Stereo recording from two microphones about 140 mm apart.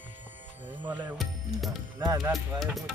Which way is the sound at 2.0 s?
25° right (ahead or behind).